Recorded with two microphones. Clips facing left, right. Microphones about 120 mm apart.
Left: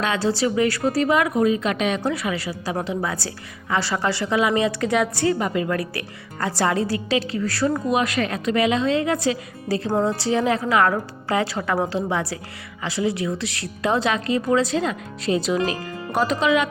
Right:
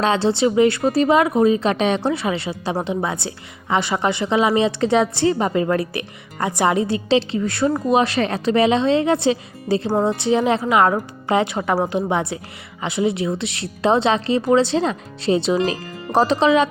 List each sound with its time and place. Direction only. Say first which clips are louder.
0.0 s a woman's voice: right 4 dB; 30° right (ahead or behind)